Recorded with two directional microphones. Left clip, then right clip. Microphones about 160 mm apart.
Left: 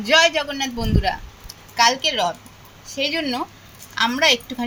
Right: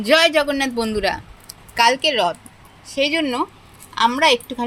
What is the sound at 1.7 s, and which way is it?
A woman's voice, 40° right (ahead or behind).